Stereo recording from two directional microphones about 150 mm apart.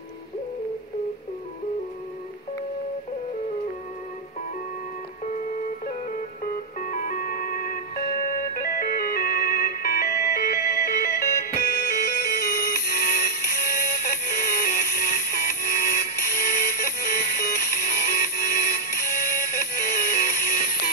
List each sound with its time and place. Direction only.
6.4 s music: 65° left (ahead or behind)